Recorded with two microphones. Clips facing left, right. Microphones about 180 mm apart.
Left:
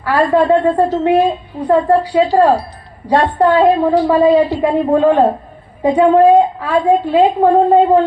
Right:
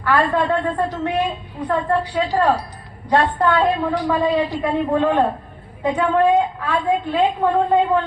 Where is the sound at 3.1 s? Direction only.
35° left (ahead or behind).